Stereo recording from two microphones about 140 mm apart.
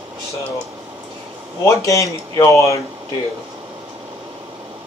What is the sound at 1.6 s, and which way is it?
Speech, 25° left (ahead or behind).